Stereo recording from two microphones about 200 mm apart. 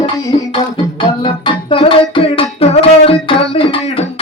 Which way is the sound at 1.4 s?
25° left (ahead or behind).